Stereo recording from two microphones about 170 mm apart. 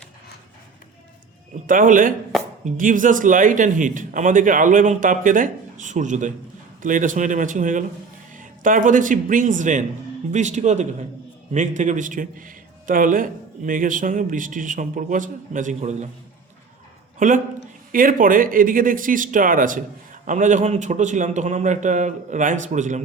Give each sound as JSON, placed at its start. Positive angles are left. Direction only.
{"t": 1.6, "sound": "a man's voice", "side_deg": -50}
{"t": 17.2, "sound": "a man's voice", "side_deg": -50}